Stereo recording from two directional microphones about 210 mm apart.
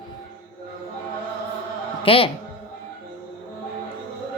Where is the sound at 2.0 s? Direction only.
25° left (ahead or behind).